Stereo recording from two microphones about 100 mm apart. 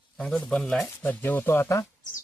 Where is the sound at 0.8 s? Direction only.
20° left (ahead or behind).